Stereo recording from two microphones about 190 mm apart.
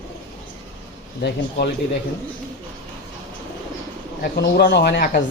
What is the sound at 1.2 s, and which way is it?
Speech, 55° left (ahead or behind).